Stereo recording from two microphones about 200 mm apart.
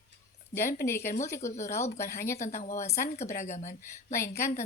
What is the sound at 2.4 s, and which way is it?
Speech, 35° left (ahead or behind).